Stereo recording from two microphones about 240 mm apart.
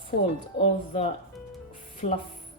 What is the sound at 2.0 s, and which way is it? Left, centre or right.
Speech, left.